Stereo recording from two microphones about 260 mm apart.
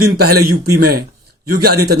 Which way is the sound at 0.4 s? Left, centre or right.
Right.